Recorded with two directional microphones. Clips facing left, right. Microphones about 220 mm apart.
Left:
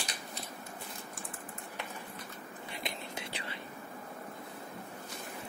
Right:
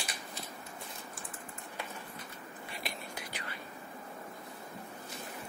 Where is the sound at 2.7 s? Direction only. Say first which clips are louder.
Left 2 dB; 20° left (ahead or behind).